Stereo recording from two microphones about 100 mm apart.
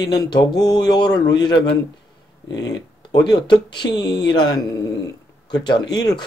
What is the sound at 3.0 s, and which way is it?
Speech, 45° left (ahead or behind).